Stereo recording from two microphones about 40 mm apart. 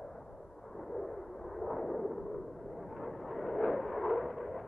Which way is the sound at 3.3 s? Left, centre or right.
Centre.